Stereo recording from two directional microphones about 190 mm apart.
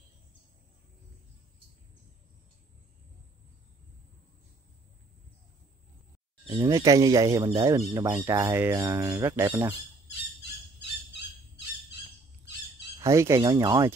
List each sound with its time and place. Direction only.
6.6 s speech: 15° right (ahead or behind)
10.8 s bird: 65° left (ahead or behind)
13.0 s speech: 15° right (ahead or behind)